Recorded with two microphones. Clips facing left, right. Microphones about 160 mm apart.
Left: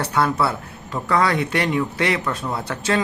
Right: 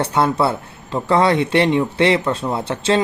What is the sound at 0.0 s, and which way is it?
Speech, 25° right (ahead or behind).